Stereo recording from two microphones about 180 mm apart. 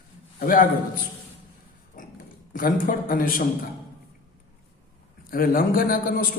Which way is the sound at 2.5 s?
50° left (ahead or behind).